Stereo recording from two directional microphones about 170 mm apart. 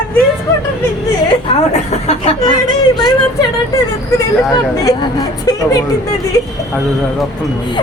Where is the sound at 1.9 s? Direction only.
40° left (ahead or behind).